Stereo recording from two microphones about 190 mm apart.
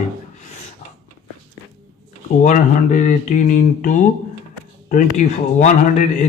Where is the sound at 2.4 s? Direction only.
40° left (ahead or behind).